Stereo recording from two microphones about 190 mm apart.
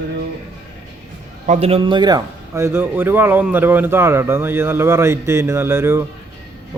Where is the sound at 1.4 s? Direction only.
35° right (ahead or behind).